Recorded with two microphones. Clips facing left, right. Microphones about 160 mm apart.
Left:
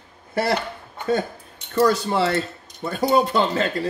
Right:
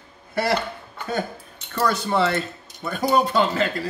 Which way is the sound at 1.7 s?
35° left (ahead or behind).